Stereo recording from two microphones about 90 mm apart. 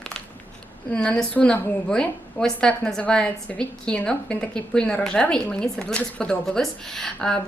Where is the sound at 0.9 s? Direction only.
10° left (ahead or behind).